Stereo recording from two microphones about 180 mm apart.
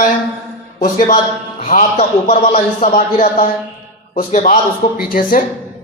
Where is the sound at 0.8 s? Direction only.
45° left (ahead or behind).